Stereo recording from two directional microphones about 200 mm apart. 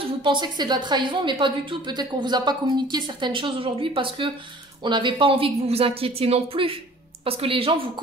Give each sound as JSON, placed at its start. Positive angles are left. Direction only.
{"t": 0.2, "sound": "speech", "side_deg": -25}